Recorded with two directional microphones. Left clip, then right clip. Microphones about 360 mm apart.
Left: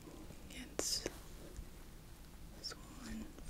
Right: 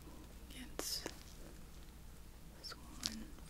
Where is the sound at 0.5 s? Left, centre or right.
Left.